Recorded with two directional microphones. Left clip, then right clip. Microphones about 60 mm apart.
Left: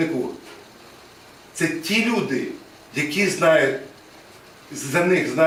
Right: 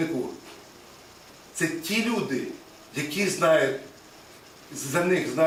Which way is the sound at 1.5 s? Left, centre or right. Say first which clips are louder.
Left 5 dB; centre.